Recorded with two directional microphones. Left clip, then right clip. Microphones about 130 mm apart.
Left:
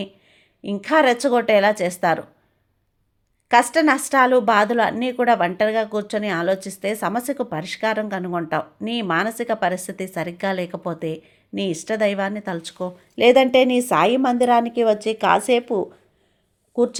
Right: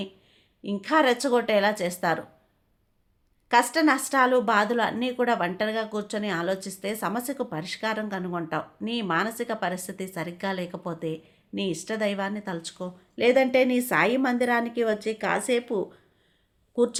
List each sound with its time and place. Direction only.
0.0 s a woman's voice: 30° left (ahead or behind)
3.5 s a woman's voice: 35° left (ahead or behind); by 17.0 s 15° left (ahead or behind)